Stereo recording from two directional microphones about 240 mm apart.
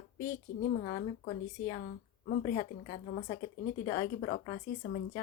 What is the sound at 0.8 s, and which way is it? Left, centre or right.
Speech, centre.